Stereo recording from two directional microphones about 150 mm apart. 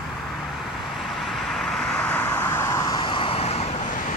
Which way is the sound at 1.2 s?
Centre (ahead or behind).